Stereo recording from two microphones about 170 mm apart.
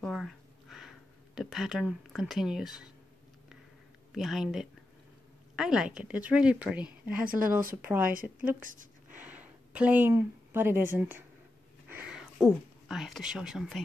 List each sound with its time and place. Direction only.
0.0 s a sound: centre (ahead or behind)
4.1 s speech: centre (ahead or behind)
7.1 s a woman's voice: 55° right (ahead or behind)
9.1 s speech: 10° right (ahead or behind)